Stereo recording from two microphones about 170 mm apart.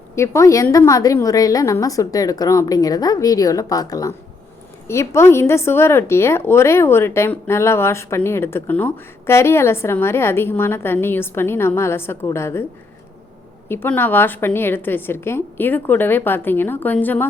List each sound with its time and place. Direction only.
0.2 s a woman's voice: 20° left (ahead or behind)
13.7 s speech: 10° left (ahead or behind)